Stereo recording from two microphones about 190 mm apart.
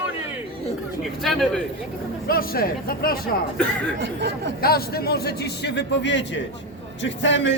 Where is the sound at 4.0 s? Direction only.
65° right (ahead or behind).